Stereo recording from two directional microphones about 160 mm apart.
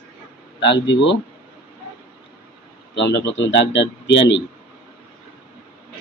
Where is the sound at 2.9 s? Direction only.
90° left.